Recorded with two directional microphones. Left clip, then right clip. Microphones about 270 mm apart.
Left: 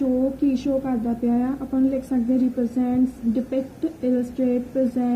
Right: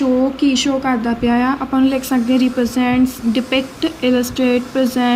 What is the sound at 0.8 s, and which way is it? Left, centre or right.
A woman's voice, centre.